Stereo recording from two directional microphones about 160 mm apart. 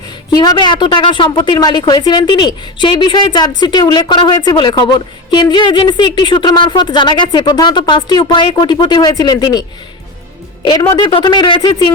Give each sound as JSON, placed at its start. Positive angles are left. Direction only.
{"t": 0.3, "sound": "a woman's voice", "side_deg": 25}